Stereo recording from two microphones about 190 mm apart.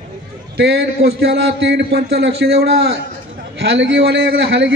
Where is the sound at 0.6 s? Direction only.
60° right (ahead or behind).